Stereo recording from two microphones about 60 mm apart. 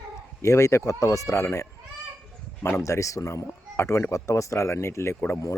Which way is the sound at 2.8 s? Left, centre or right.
Left.